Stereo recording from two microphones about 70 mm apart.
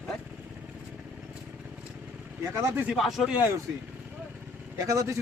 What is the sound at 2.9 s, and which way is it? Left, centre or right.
Speech, centre.